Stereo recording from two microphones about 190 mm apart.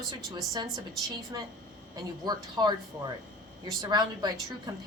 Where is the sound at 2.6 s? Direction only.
20° right (ahead or behind).